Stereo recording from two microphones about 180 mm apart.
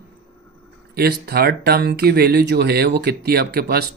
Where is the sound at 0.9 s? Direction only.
60° right (ahead or behind).